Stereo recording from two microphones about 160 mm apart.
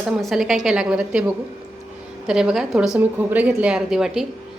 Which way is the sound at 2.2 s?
5° right (ahead or behind).